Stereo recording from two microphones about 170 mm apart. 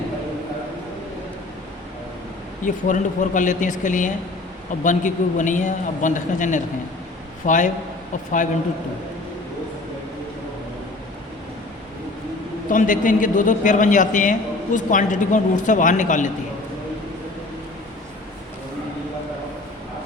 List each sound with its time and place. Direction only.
2.6 s a man's voice: 45° left (ahead or behind)
12.6 s a man's voice: 50° left (ahead or behind)